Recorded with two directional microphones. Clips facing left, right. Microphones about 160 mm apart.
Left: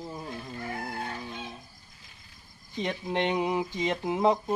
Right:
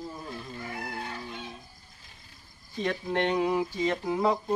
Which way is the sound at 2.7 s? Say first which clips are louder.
Right 1 dB; 20° left (ahead or behind).